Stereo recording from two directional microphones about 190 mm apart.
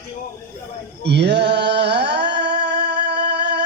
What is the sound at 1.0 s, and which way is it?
Music, 60° right (ahead or behind).